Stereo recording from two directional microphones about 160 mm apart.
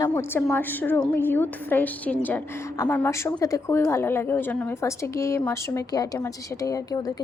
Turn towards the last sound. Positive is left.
turn(degrees=25)  # may be behind; listen again after turning